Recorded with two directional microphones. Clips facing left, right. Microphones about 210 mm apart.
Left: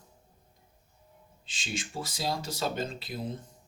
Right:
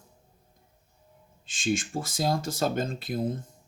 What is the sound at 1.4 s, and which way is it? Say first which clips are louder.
Speech: right 10 dB; 50° right (ahead or behind).